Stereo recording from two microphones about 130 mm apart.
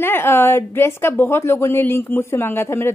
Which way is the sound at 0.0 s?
15° left (ahead or behind).